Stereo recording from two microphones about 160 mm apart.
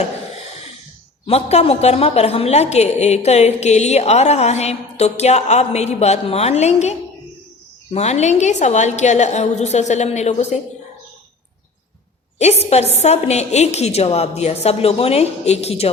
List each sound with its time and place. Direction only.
1.3 s a woman's voice: 40° left (ahead or behind)
7.9 s a woman's voice: 45° left (ahead or behind)
12.4 s a woman's voice: 40° left (ahead or behind)